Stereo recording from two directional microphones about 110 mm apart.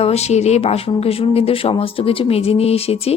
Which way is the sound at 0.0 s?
75° left (ahead or behind).